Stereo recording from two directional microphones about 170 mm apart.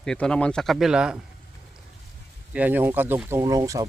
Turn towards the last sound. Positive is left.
turn(degrees=-20)  # may be behind; listen again after turning